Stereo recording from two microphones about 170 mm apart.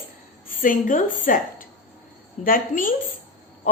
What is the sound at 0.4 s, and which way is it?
A woman's voice, 55° left (ahead or behind).